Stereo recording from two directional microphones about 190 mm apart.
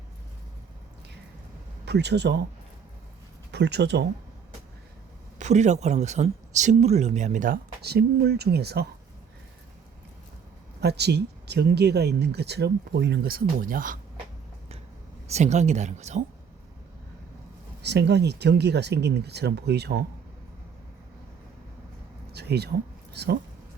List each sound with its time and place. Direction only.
1.8 s speech: 60° right (ahead or behind)
3.5 s speech: 65° right (ahead or behind)
5.4 s speech: 40° right (ahead or behind); by 8.9 s 60° right (ahead or behind)
10.8 s speech: 60° right (ahead or behind)
15.3 s speech: 35° right (ahead or behind)
17.8 s speech: 65° right (ahead or behind)
22.3 s a sound: 60° right (ahead or behind)
23.1 s speech: 60° right (ahead or behind)